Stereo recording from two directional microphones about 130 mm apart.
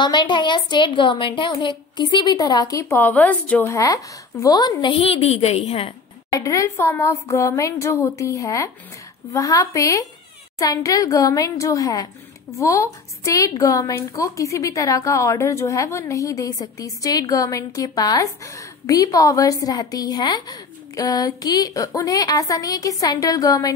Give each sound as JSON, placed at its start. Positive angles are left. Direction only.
{"t": 0.0, "sound": "a woman's voice", "side_deg": 35}
{"t": 3.7, "sound": "speech", "side_deg": 25}
{"t": 4.9, "sound": "a woman's voice", "side_deg": 50}
{"t": 6.3, "sound": "speech", "side_deg": 25}